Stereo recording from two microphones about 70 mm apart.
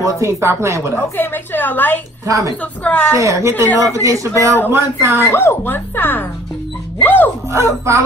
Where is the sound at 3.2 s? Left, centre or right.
Right.